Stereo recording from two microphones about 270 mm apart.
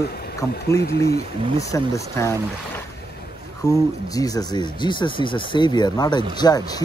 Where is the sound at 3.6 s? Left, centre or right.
Centre.